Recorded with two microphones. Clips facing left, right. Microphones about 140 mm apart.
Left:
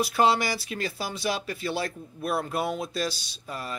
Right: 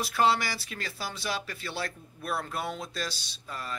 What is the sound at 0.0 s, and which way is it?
A man's voice, 15° left (ahead or behind).